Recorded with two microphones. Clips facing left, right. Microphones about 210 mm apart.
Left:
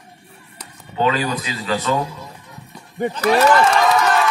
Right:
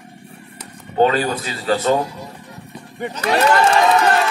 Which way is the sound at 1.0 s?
45° right (ahead or behind).